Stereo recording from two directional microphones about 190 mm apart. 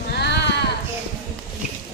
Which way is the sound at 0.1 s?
60° left (ahead or behind).